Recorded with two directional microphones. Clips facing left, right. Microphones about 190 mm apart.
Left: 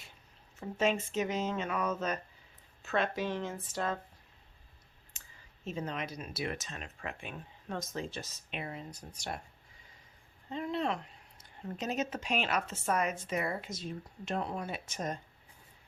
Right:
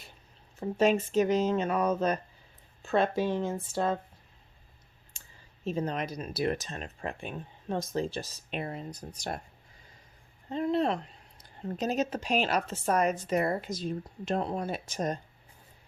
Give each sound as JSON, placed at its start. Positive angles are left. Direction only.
{"t": 0.8, "sound": "speech", "side_deg": -35}
{"t": 5.2, "sound": "a sound", "side_deg": -30}
{"t": 5.6, "sound": "speech", "side_deg": -35}
{"t": 10.5, "sound": "speech", "side_deg": -40}